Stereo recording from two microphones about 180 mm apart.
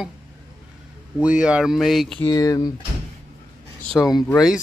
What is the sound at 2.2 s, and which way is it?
Speech, 20° left (ahead or behind).